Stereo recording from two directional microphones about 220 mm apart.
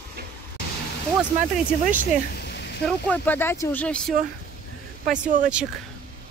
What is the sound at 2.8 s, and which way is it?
Speech, 5° left (ahead or behind).